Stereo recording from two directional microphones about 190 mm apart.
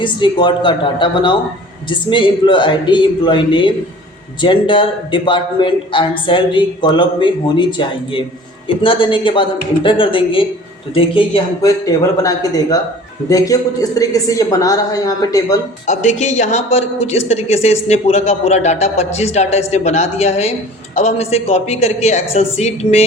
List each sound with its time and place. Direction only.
0.0 s a man's voice: 25° left (ahead or behind)
15.9 s speech: 40° left (ahead or behind)